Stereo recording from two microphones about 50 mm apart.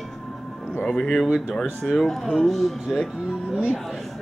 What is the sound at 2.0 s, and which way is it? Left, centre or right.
Speech, centre.